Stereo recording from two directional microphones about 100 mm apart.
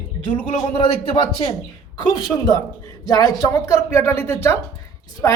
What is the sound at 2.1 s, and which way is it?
Speech, 40° left (ahead or behind).